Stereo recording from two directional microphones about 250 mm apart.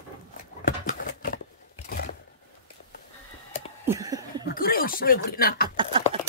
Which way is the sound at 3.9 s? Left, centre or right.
Centre.